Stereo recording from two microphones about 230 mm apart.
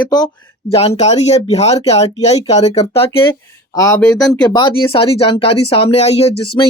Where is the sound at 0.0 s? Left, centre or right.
Centre.